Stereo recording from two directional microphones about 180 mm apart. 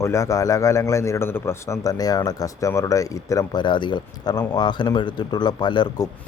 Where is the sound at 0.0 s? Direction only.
15° left (ahead or behind).